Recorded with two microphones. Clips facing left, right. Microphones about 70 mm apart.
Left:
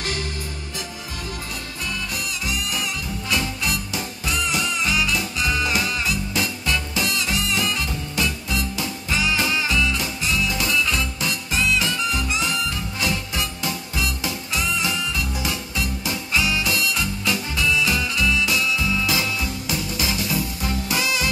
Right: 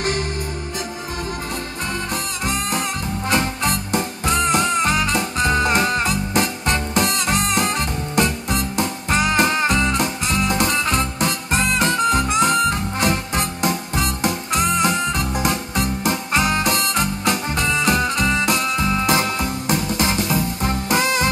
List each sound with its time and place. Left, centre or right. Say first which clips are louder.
2.4 s music: right 5 dB; right